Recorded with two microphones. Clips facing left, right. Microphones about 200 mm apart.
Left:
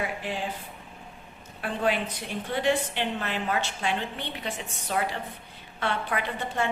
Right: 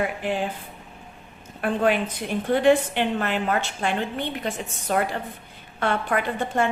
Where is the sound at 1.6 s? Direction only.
55° right (ahead or behind).